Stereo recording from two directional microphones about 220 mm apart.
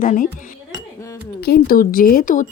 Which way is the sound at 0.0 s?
40° left (ahead or behind).